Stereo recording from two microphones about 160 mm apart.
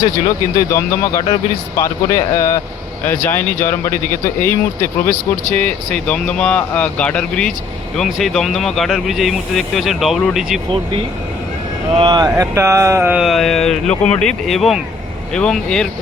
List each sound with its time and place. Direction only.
0.7 s speech: 20° left (ahead or behind); by 10.6 s centre (ahead or behind)
11.9 s speech: 30° right (ahead or behind); by 15.9 s 5° left (ahead or behind)